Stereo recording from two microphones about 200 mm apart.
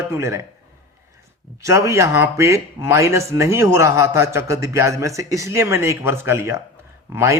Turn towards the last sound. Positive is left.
turn(degrees=-15)  # may be behind; listen again after turning